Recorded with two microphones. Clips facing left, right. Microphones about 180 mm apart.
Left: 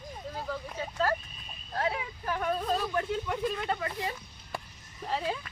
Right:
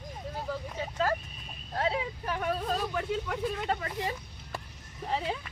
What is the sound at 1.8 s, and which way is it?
Speech, 25° right (ahead or behind).